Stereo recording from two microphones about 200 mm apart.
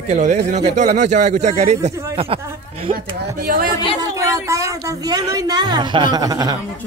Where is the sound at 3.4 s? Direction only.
50° right (ahead or behind).